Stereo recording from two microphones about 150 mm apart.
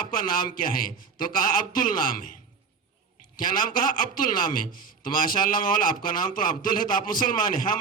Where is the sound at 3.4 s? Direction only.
65° left (ahead or behind).